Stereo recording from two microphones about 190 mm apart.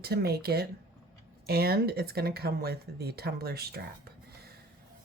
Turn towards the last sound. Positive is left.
turn(degrees=-55)  # may be behind; listen again after turning